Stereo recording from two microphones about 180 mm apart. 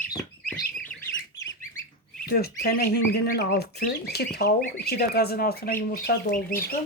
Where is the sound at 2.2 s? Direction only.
55° left (ahead or behind).